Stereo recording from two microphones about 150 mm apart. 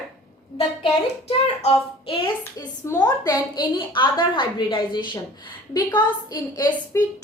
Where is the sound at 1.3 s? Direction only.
40° left (ahead or behind).